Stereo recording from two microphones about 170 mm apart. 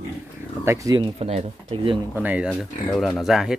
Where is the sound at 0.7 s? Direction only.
20° right (ahead or behind); by 2.0 s 35° right (ahead or behind).